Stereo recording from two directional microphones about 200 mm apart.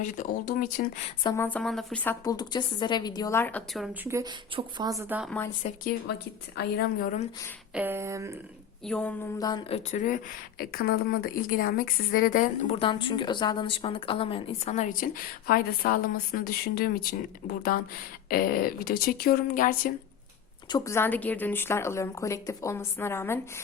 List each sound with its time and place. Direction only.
0.0 s speech: 40° left (ahead or behind)
1.2 s a woman's voice: 15° left (ahead or behind)
2.2 s a woman's voice: 20° left (ahead or behind)
3.8 s speech: 10° right (ahead or behind)
5.6 s speech: 30° left (ahead or behind)
6.6 s a woman's voice: 55° left (ahead or behind)
7.7 s speech: 10° right (ahead or behind)
8.9 s a woman's voice: 5° left (ahead or behind)
9.4 s a woman's voice: 20° left (ahead or behind); by 19.9 s 45° left (ahead or behind)
20.7 s a woman's voice: 15° left (ahead or behind)